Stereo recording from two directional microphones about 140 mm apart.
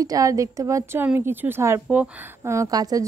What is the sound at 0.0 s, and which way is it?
A woman's voice, 25° right (ahead or behind).